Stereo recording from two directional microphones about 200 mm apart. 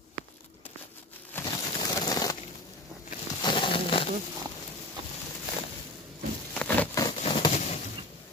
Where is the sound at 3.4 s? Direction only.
25° left (ahead or behind).